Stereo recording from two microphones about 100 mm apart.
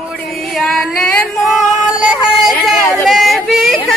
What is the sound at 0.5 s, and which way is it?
Music, centre (ahead or behind).